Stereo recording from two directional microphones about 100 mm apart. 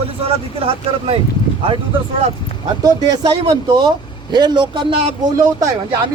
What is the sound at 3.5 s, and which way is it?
A man's voice, 45° right (ahead or behind).